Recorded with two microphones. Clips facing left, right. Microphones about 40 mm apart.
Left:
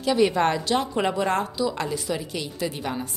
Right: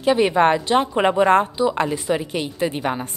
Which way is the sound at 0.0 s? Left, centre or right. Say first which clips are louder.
Right 4 dB; right.